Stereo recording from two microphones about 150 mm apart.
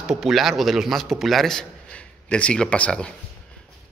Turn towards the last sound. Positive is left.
turn(degrees=10)  # may be behind; listen again after turning